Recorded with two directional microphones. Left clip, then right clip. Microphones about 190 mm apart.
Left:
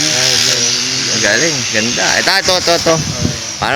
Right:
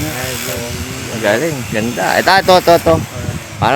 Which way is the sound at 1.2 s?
10° right (ahead or behind).